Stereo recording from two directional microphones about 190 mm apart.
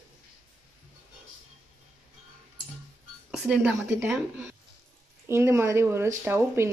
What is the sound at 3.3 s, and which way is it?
Speech, 5° right (ahead or behind).